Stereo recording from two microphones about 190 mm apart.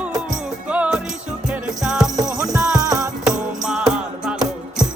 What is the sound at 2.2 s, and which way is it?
Music, 15° right (ahead or behind).